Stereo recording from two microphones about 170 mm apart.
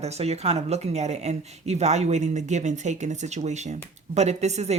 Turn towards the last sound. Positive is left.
turn(degrees=-40)  # may be behind; listen again after turning